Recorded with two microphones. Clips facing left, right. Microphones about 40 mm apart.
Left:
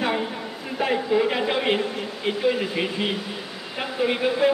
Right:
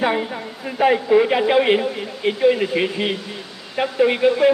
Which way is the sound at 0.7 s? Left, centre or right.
Right.